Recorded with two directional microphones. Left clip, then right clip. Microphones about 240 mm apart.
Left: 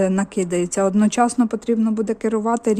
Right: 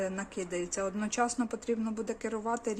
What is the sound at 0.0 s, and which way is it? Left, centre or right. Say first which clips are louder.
Speech: left 14 dB; left.